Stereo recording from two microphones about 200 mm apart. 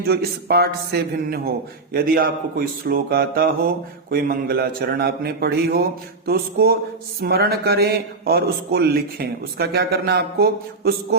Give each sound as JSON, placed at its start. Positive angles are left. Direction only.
{"t": 0.1, "sound": "a man's voice", "side_deg": -55}